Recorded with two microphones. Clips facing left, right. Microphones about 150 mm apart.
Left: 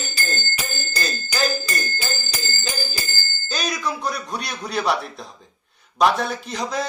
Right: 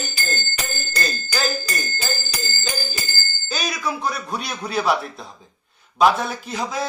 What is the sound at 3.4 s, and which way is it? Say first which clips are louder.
Bicycle bell: even; 5° right (ahead or behind).